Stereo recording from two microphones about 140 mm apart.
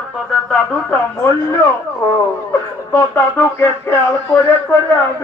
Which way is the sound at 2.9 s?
15° left (ahead or behind).